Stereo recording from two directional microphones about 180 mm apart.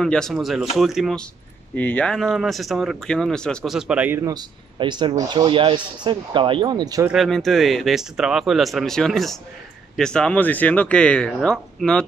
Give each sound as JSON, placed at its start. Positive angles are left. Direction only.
{"t": 0.0, "sound": "speech", "side_deg": 5}
{"t": 7.1, "sound": "speech", "side_deg": 0}